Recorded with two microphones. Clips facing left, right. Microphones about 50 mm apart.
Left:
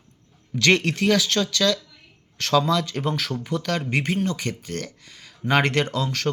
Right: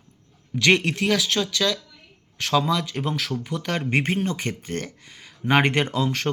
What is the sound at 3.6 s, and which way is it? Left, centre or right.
Speech, right.